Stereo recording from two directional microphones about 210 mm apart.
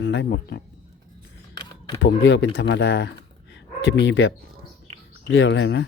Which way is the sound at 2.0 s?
60° left (ahead or behind).